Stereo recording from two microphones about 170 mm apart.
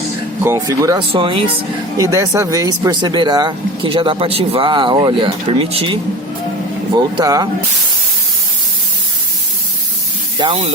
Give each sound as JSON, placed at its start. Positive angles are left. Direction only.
{"t": 0.4, "sound": "speech", "side_deg": -20}
{"t": 1.1, "sound": "speech", "side_deg": -30}
{"t": 2.0, "sound": "speech", "side_deg": -20}
{"t": 6.9, "sound": "speech", "side_deg": -20}
{"t": 10.3, "sound": "speech", "side_deg": -30}